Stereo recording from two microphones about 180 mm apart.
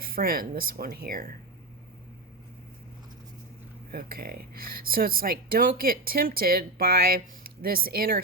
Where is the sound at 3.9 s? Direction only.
55° right (ahead or behind).